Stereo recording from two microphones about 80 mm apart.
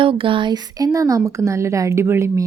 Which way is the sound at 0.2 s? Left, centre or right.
Right.